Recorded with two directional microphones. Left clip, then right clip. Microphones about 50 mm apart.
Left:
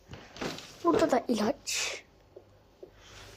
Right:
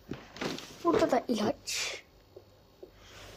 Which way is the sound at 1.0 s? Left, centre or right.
Left.